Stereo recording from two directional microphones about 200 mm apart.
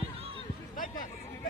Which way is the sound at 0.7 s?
40° left (ahead or behind).